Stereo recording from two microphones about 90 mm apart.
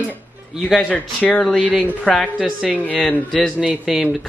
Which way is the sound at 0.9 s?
15° left (ahead or behind).